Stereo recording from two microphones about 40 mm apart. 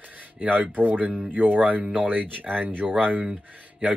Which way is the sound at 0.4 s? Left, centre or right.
Right.